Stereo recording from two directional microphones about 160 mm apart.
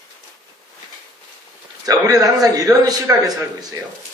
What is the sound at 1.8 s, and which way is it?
A man's voice, 20° right (ahead or behind).